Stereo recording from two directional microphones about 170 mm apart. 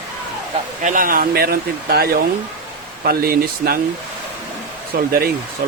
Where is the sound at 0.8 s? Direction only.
50° right (ahead or behind).